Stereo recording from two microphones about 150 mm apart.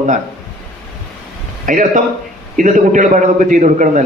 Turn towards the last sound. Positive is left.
turn(degrees=-55)  # may be behind; listen again after turning